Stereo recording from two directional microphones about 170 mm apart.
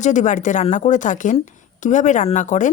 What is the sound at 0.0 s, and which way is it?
Speech, 45° left (ahead or behind).